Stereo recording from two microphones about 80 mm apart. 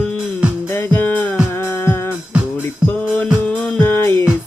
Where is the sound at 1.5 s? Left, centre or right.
Left.